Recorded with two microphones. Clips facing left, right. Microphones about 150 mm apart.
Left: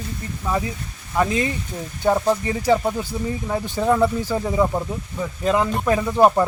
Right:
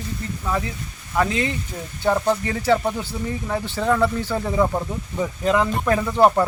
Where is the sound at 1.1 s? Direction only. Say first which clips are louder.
Left 1 dB; 15° left (ahead or behind).